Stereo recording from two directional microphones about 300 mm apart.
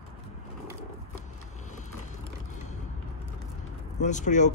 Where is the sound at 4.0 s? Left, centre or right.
Left.